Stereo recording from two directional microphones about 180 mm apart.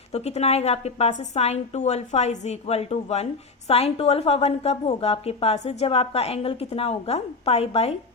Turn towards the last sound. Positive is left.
turn(degrees=35)  # may be behind; listen again after turning